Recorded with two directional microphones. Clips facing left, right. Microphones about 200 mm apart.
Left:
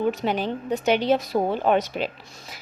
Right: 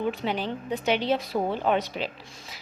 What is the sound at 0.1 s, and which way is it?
Speech, 45° left (ahead or behind).